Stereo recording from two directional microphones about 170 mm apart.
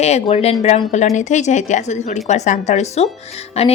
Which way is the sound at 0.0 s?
40° left (ahead or behind).